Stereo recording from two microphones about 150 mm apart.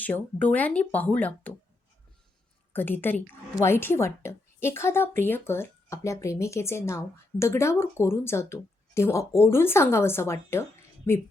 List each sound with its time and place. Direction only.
0.0 s a woman's voice: 10° left (ahead or behind)
2.7 s a woman's voice: 15° left (ahead or behind)